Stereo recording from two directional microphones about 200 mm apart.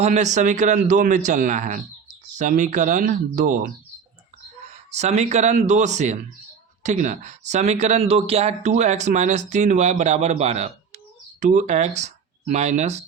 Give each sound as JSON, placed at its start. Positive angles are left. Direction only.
{"t": 0.0, "sound": "speech", "side_deg": -35}
{"t": 4.9, "sound": "speech", "side_deg": -35}